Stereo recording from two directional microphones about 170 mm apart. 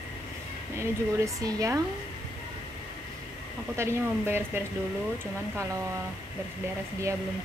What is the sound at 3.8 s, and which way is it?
Speech, 15° right (ahead or behind).